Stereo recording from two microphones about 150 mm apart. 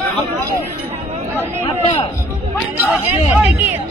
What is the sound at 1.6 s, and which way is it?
Speech, 35° left (ahead or behind).